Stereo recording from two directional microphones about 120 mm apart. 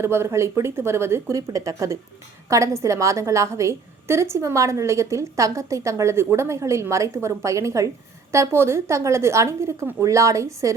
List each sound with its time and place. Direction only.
0.0 s a woman's voice: 20° right (ahead or behind)